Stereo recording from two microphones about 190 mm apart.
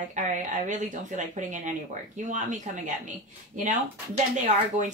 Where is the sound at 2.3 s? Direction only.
40° right (ahead or behind).